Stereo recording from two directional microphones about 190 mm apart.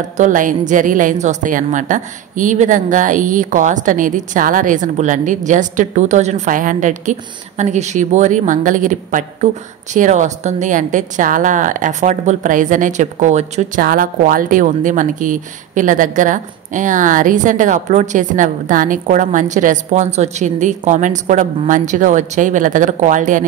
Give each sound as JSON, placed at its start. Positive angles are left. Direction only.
{"t": 0.2, "sound": "a woman's voice", "side_deg": -45}